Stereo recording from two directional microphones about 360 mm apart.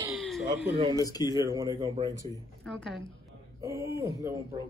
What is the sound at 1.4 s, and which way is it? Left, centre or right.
Speech, centre.